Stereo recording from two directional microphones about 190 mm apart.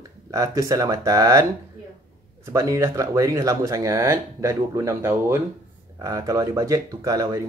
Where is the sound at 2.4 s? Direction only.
15° right (ahead or behind).